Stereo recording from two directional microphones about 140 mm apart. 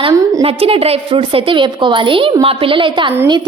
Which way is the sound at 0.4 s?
45° right (ahead or behind).